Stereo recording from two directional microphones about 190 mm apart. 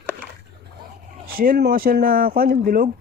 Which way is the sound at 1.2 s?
50° right (ahead or behind).